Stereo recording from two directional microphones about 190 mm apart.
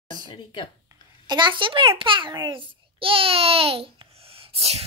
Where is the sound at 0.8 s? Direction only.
25° right (ahead or behind).